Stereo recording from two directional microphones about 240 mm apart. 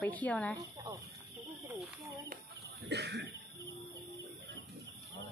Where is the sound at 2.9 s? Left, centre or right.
Right.